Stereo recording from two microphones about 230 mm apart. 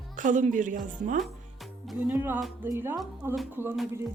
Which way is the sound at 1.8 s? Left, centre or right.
Centre.